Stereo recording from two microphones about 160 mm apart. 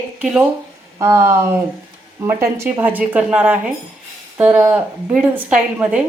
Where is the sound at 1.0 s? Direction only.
15° right (ahead or behind).